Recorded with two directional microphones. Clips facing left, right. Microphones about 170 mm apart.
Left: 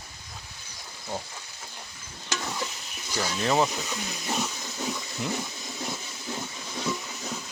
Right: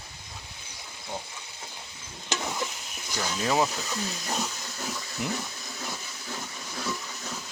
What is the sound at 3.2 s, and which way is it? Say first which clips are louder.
Speech: left 1 dB; centre (ahead or behind).